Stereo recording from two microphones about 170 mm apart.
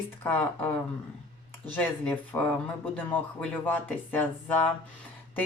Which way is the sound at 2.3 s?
15° left (ahead or behind).